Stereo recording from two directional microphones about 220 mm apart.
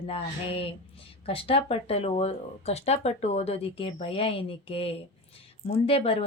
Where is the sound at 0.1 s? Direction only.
25° left (ahead or behind).